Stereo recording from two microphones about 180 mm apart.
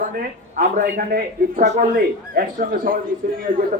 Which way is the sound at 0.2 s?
50° right (ahead or behind).